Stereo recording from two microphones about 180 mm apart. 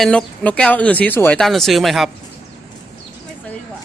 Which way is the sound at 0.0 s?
5° left (ahead or behind).